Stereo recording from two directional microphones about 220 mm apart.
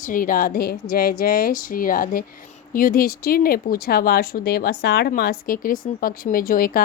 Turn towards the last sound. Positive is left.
turn(degrees=40)  # may be behind; listen again after turning